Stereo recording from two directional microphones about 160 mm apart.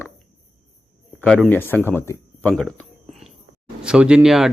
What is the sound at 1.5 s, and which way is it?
Speech, 10° left (ahead or behind).